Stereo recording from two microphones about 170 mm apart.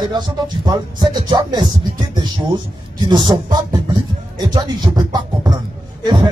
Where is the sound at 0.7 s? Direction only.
25° right (ahead or behind).